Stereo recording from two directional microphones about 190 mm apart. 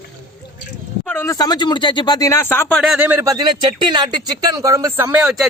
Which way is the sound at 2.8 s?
5° right (ahead or behind).